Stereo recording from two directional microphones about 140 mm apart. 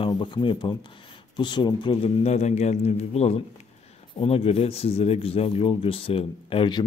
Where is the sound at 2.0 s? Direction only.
50° left (ahead or behind).